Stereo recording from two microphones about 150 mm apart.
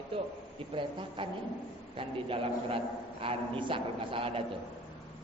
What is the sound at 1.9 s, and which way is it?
A man's voice, 35° right (ahead or behind).